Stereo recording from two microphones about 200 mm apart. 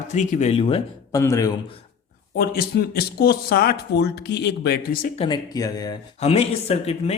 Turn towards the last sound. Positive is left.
turn(degrees=30)  # may be behind; listen again after turning